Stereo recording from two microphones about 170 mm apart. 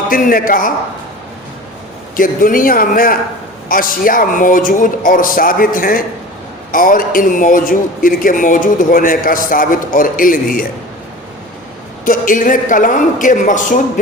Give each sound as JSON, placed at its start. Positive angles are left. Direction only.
{"t": 0.1, "sound": "speech", "side_deg": 55}
{"t": 2.1, "sound": "a man's voice", "side_deg": 55}
{"t": 12.0, "sound": "a man's voice", "side_deg": 50}